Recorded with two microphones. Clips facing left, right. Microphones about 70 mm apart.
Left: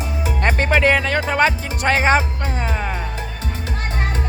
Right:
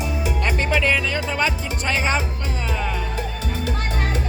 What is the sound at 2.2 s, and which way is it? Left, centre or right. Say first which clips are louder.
Music: left 4 dB; left.